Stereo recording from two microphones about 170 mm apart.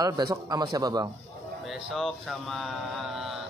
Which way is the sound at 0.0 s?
20° right (ahead or behind).